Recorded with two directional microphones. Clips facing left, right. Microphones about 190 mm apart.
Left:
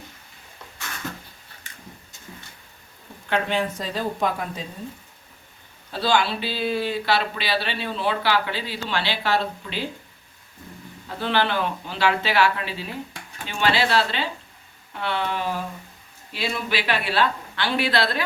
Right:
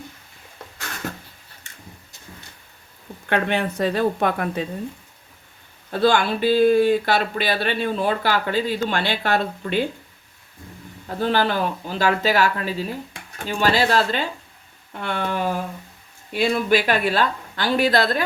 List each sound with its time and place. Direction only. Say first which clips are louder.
3.2 s a woman's voice: right 2 dB; 60° right (ahead or behind)
5.9 s speech: right 4 dB; 50° right (ahead or behind)
11.2 s speech: right 3 dB; 40° right (ahead or behind)